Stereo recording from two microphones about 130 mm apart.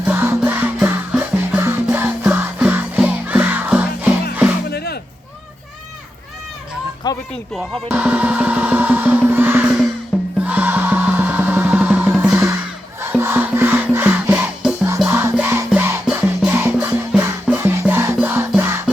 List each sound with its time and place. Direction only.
0.0 s music: 15° right (ahead or behind)
7.9 s music: 15° right (ahead or behind)
16.7 s music: 5° right (ahead or behind)